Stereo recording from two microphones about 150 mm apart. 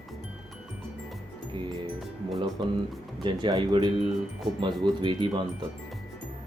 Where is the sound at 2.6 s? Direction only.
30° right (ahead or behind).